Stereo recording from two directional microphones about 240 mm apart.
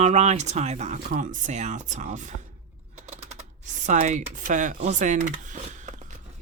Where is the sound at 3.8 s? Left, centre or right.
Right.